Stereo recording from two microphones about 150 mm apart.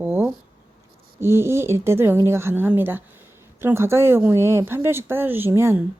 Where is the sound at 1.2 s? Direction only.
15° right (ahead or behind).